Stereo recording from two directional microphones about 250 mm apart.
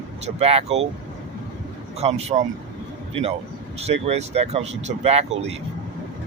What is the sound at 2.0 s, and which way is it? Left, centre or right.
A man's voice, right.